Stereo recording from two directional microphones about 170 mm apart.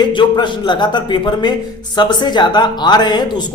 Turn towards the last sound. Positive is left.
turn(degrees=25)  # may be behind; listen again after turning